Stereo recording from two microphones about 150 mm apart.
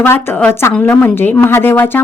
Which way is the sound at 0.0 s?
15° left (ahead or behind).